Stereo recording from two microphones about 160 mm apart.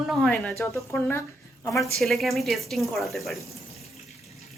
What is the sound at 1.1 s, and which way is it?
Speech, 15° left (ahead or behind).